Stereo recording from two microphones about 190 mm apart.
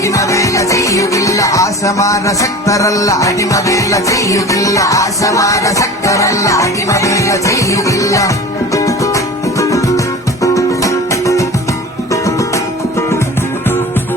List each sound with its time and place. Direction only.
0.0 s music: 15° left (ahead or behind)